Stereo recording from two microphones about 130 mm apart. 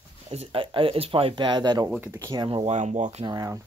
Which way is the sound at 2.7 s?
65° right (ahead or behind).